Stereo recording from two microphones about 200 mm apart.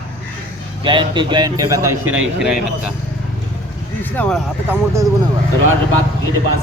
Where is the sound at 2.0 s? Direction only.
90° right.